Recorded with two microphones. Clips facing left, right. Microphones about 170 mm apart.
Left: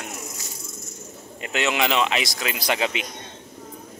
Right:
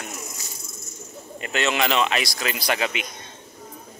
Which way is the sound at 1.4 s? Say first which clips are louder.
Even; 15° left (ahead or behind).